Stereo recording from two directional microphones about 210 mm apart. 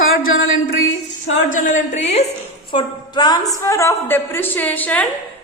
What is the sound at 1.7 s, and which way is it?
A woman's voice, 35° left (ahead or behind).